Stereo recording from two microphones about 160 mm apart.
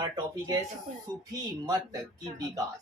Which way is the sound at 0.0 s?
25° right (ahead or behind).